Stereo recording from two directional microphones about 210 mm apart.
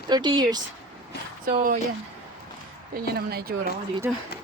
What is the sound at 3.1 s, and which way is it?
Speech, 50° right (ahead or behind).